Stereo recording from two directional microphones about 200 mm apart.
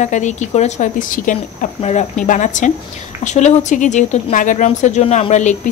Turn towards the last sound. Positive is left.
turn(degrees=35)  # may be behind; listen again after turning